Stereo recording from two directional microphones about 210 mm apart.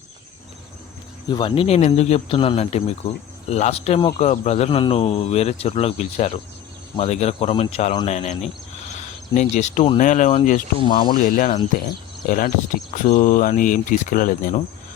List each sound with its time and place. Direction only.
1.3 s a man's voice: 25° left (ahead or behind)
10.8 s a man's voice: 25° left (ahead or behind)
11.1 s speech: 35° left (ahead or behind)
12.9 s speech: 35° left (ahead or behind)